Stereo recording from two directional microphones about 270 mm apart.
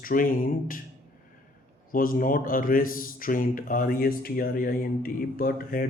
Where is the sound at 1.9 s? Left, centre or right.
Left.